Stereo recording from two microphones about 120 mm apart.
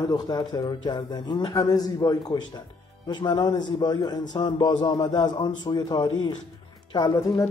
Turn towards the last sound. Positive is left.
turn(degrees=25)  # may be behind; listen again after turning